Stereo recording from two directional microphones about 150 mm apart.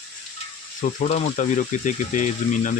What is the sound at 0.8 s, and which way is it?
Speech, 55° left (ahead or behind).